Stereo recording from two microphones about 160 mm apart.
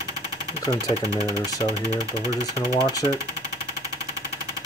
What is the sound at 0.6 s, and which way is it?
Speech, 20° left (ahead or behind).